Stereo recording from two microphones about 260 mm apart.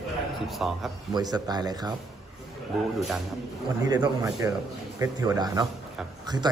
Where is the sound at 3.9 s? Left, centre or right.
Centre.